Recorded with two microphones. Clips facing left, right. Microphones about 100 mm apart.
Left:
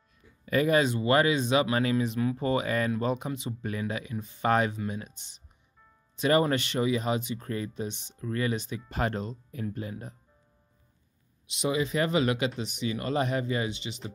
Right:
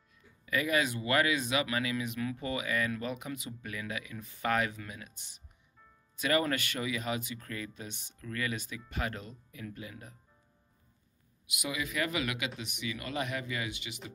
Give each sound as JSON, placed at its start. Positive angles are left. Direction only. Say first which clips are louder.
{"t": 0.5, "sound": "speech", "louder": "left 6 dB", "side_deg": 35}
{"t": 6.1, "sound": "speech", "louder": "left 6 dB", "side_deg": 30}
{"t": 11.4, "sound": "speech", "louder": "left 9 dB", "side_deg": 30}